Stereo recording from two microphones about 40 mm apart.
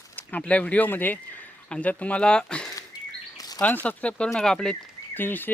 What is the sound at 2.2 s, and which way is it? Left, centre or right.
Speech, left.